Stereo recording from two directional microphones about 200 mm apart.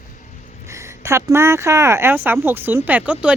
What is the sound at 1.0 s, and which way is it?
Speech, 15° right (ahead or behind).